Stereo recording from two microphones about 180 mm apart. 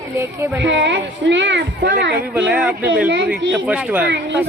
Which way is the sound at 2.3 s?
5° right (ahead or behind).